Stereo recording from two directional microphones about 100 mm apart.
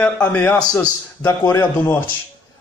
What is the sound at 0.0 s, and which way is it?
A man's voice, 15° left (ahead or behind).